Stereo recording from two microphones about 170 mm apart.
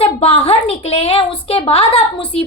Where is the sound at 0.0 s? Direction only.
35° left (ahead or behind).